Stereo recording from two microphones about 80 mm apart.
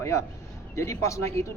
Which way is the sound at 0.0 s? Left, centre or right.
Left.